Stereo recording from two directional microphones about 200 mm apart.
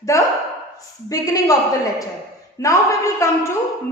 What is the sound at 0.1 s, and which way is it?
A woman's voice, 15° left (ahead or behind).